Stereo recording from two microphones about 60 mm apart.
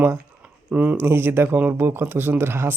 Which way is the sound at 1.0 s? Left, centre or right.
Right.